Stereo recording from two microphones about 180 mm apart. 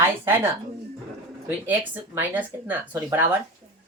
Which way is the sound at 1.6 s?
10° right (ahead or behind).